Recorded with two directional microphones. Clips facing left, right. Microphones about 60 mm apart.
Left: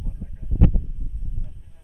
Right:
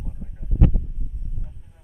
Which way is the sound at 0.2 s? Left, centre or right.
Centre.